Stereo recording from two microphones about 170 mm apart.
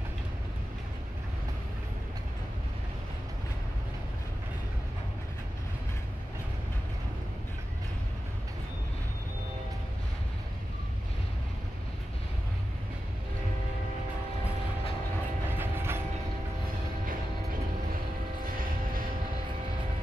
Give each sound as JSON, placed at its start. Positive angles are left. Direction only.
{"t": 15.5, "sound": "train", "side_deg": -15}
{"t": 18.4, "sound": "mechanisms", "side_deg": -55}